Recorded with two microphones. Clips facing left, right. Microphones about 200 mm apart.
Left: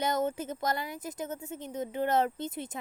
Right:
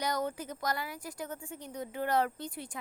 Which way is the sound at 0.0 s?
25° left (ahead or behind).